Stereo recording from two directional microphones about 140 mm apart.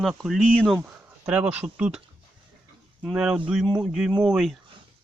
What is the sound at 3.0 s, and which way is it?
Speech, 5° right (ahead or behind).